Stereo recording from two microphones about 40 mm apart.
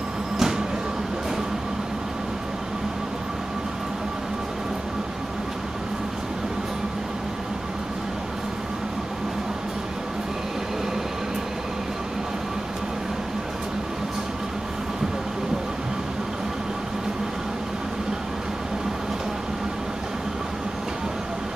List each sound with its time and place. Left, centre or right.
0.4 s train: centre